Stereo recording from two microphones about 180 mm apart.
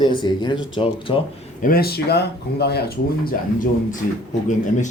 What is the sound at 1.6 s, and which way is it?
Speech, 55° left (ahead or behind).